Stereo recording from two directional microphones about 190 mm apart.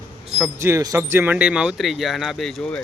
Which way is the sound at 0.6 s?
15° right (ahead or behind).